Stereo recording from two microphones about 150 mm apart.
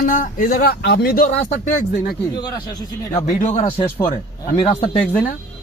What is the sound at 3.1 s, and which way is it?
Speech, 50° left (ahead or behind).